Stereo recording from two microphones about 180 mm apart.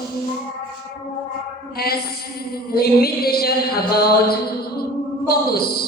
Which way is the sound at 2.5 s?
60° left (ahead or behind).